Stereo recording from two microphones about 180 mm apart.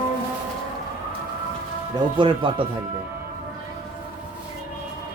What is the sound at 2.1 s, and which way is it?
Speech, 25° right (ahead or behind).